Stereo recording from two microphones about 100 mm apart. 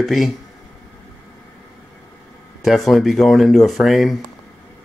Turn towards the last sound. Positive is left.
turn(degrees=0)  # may be behind; listen again after turning